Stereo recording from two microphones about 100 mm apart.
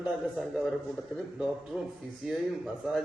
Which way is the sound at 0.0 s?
5° right (ahead or behind).